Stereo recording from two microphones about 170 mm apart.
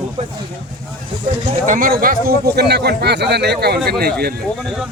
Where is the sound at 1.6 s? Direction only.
50° right (ahead or behind).